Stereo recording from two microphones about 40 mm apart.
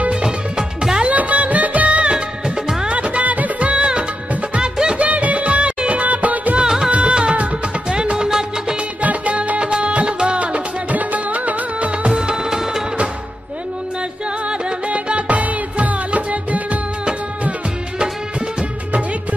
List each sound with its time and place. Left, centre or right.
0.1 s music: centre
1.0 s music: right
2.1 s music: centre
2.9 s music of bollywood: right
4.6 s music: right
4.9 s music: right
6.6 s music: centre
6.9 s music: right
8.3 s music of bollywood: centre
9.0 s music: right
12.1 s music: centre
14.9 s music: right